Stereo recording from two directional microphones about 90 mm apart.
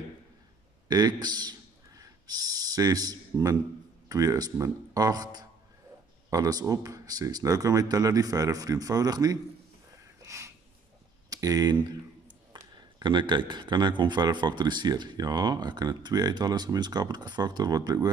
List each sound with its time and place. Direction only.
0.8 s a man's voice: 50° right (ahead or behind)
10.2 s a sound: 35° right (ahead or behind)
12.7 s speech: 60° right (ahead or behind)